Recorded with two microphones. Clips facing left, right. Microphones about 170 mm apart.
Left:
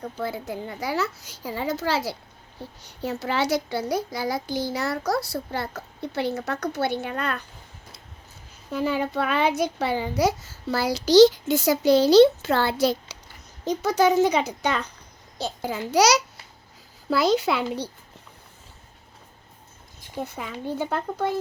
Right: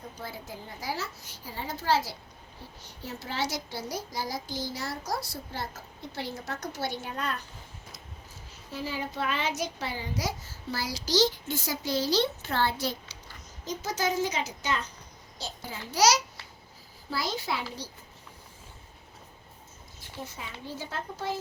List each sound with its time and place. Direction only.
0.0 s a child's voice: 65° left (ahead or behind)
8.7 s a child's voice: 60° left (ahead or behind); by 13.1 s 80° left
13.7 s a child's voice: 65° left (ahead or behind)
20.1 s a child's voice: 60° left (ahead or behind)